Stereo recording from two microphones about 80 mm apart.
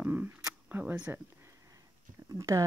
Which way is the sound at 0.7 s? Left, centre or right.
Right.